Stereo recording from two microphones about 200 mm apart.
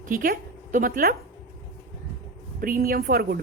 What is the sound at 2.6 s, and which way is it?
Speech, 45° right (ahead or behind).